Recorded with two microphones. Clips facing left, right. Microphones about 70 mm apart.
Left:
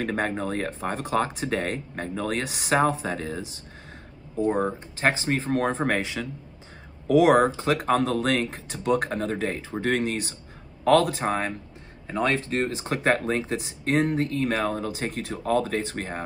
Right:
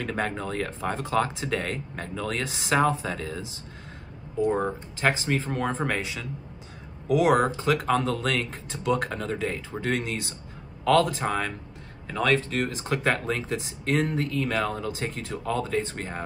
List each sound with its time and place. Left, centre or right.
0.0 s speech: left
5.0 s speech: left